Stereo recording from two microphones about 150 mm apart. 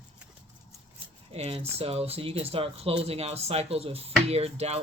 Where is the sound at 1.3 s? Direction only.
45° right (ahead or behind).